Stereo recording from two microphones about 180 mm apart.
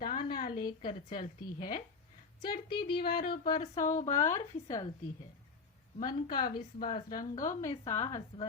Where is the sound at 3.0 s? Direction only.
60° left (ahead or behind).